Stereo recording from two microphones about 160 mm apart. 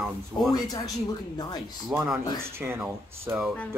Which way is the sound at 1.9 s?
5° right (ahead or behind).